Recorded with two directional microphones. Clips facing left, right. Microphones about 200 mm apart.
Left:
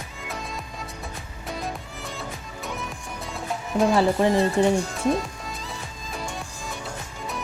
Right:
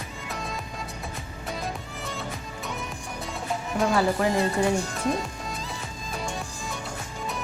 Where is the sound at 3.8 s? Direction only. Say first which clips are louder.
Left 4 dB; 25° left (ahead or behind).